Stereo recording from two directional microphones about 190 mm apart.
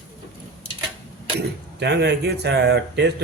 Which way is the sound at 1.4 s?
60° right (ahead or behind).